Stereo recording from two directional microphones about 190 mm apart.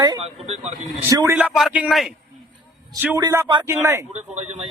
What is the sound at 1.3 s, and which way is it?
Speech, centre (ahead or behind).